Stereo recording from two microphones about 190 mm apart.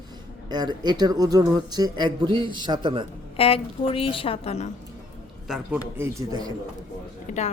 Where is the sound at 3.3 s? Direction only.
30° left (ahead or behind).